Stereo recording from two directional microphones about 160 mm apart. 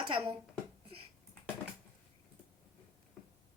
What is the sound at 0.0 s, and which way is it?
Speech, 30° right (ahead or behind).